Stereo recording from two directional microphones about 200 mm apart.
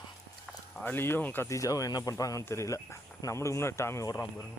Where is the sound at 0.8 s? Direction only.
10° left (ahead or behind).